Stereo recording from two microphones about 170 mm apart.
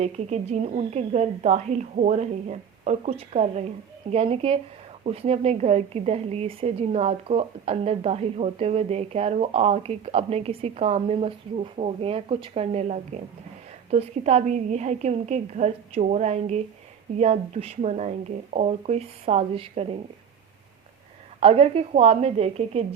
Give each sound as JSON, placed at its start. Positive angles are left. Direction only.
{"t": 0.0, "sound": "a woman's voice", "side_deg": -40}
{"t": 21.4, "sound": "a woman's voice", "side_deg": -35}